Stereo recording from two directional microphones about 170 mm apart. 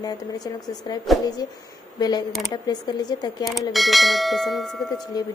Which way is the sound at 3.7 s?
Centre (ahead or behind).